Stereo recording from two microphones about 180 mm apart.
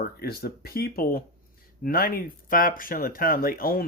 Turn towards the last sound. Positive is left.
turn(degrees=55)  # may be behind; listen again after turning